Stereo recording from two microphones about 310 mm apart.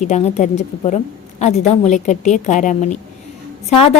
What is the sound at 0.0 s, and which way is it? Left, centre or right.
A woman's voice, left.